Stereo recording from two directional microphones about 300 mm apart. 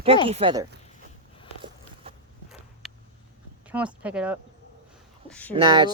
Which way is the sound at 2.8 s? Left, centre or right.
Centre.